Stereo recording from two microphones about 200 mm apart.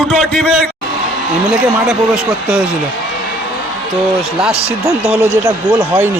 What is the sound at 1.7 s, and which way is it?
Speech, 5° right (ahead or behind).